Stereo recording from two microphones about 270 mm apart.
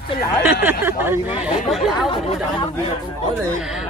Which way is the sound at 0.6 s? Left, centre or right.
Centre.